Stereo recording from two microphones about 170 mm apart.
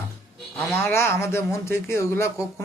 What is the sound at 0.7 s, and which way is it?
Speech, 15° left (ahead or behind).